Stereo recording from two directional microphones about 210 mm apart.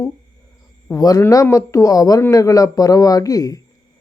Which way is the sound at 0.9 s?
15° left (ahead or behind).